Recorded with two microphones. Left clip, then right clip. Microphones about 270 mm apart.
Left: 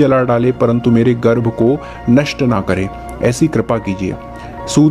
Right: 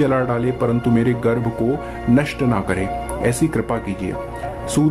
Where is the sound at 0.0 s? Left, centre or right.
Left.